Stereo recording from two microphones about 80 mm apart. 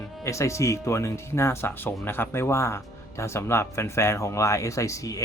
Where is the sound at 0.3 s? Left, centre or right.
Left.